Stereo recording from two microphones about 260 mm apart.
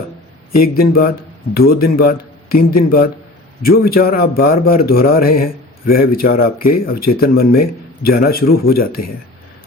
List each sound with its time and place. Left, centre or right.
0.5 s a man's voice: left